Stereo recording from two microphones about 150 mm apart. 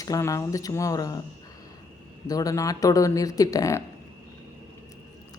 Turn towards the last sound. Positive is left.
turn(degrees=20)  # may be behind; listen again after turning